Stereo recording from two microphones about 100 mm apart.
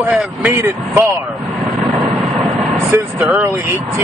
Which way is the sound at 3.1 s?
15° right (ahead or behind).